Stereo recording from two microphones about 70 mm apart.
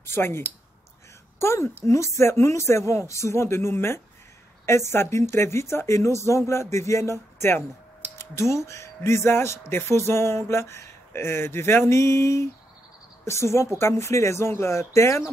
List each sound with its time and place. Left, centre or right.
0.1 s speech: left
1.4 s speech: left